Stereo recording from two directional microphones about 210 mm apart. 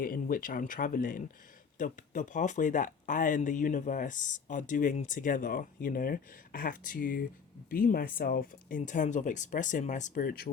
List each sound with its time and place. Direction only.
0.0 s speech: 40° left (ahead or behind)